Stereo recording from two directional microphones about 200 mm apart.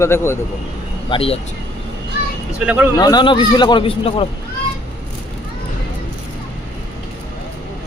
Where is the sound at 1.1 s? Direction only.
30° left (ahead or behind).